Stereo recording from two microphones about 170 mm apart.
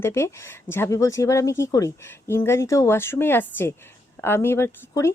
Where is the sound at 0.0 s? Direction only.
15° left (ahead or behind).